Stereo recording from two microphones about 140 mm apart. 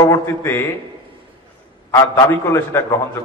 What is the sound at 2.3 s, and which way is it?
Speech, 20° left (ahead or behind).